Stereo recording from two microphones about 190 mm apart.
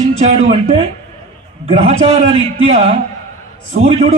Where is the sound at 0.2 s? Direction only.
35° right (ahead or behind).